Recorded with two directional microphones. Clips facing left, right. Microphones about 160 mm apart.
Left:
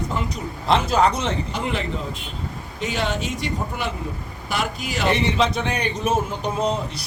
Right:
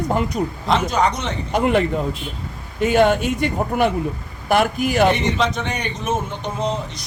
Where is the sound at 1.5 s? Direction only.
55° right (ahead or behind).